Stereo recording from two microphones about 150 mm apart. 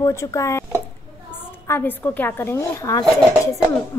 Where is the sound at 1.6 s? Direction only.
15° left (ahead or behind).